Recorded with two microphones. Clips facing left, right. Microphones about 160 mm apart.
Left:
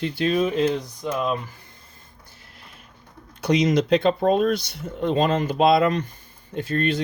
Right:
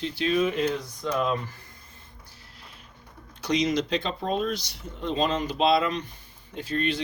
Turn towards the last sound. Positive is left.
turn(degrees=50)  # may be behind; listen again after turning